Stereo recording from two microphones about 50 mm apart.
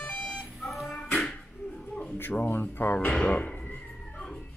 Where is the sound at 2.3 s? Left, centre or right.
Left.